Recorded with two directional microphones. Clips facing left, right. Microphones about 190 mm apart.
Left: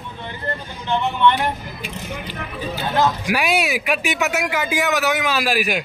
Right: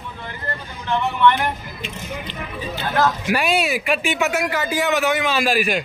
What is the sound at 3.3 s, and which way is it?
A man's voice, 10° left (ahead or behind).